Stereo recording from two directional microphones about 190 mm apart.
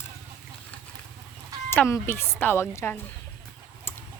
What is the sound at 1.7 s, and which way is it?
Speech, 10° left (ahead or behind).